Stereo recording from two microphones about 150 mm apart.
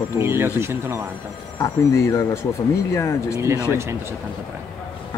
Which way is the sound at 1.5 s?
20° left (ahead or behind).